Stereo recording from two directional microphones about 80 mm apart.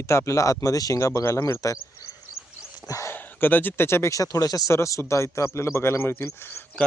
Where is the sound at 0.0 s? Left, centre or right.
Left.